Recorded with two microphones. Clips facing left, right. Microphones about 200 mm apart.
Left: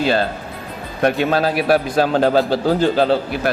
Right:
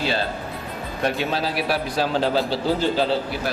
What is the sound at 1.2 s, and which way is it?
A man's voice, 55° left (ahead or behind).